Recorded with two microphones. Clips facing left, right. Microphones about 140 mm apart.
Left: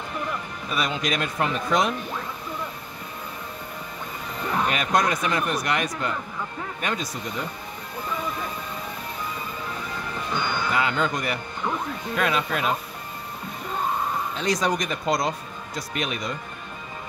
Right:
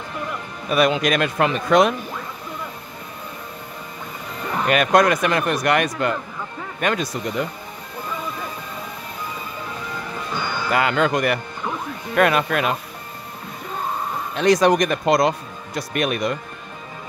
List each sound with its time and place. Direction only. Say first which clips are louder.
0.7 s speech: right 9 dB; 65° right (ahead or behind)
4.6 s speech: right 9 dB; 70° right (ahead or behind)
10.3 s speech: even; 10° right (ahead or behind)
10.7 s speech: right 7 dB; 75° right (ahead or behind)
12.2 s speech: right 7 dB; 60° right (ahead or behind)
14.3 s speech: right 11 dB; 70° right (ahead or behind)